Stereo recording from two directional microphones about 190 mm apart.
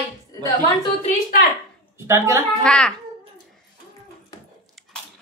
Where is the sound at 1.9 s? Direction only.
15° right (ahead or behind).